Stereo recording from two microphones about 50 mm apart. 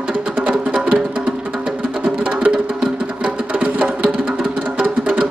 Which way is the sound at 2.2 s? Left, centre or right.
Right.